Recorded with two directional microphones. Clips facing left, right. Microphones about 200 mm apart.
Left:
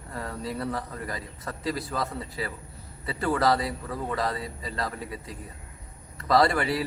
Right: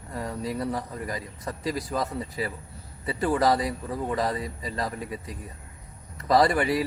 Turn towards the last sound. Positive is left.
turn(degrees=-15)  # may be behind; listen again after turning